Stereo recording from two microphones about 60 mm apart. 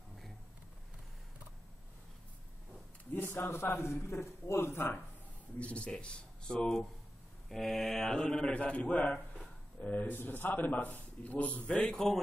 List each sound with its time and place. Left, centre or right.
3.2 s a man's voice: left
5.6 s a man's voice: centre
11.7 s a man's voice: centre